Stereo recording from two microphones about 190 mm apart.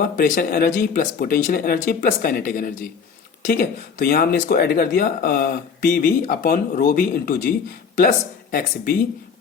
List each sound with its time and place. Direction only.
0.0 s speech: 45° left (ahead or behind)
8.5 s speech: 50° left (ahead or behind)